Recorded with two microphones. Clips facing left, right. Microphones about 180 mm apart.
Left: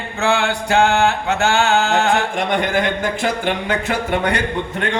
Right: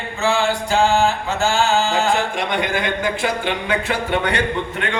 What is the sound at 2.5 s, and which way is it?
Speech, 45° left (ahead or behind).